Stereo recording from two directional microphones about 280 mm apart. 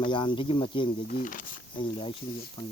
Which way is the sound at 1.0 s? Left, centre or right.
Left.